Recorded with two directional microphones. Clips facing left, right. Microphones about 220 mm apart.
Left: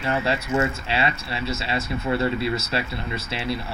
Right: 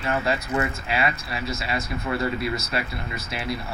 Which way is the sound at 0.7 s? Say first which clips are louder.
Left 1 dB; 30° left (ahead or behind).